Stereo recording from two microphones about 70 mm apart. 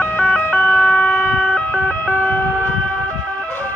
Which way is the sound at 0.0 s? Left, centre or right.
Centre.